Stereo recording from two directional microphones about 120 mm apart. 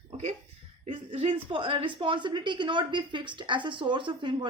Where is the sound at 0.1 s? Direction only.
55° right (ahead or behind).